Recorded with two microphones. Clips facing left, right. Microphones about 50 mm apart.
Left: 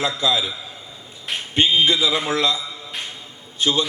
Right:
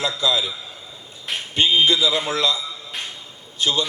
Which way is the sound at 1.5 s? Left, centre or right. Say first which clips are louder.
Even; left.